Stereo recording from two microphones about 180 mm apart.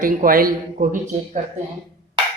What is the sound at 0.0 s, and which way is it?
Speech, 50° right (ahead or behind).